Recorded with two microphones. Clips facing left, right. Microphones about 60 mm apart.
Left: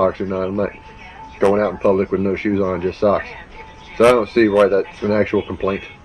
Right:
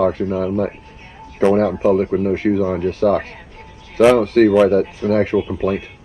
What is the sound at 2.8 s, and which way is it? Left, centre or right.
Speech, centre.